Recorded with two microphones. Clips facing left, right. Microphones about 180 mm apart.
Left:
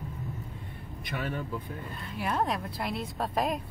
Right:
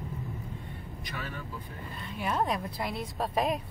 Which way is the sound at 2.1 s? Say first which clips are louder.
Even; centre (ahead or behind).